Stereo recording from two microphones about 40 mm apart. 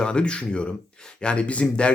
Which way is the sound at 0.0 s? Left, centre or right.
Left.